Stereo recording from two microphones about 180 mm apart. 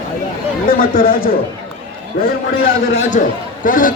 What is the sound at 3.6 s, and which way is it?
Speech, 50° left (ahead or behind).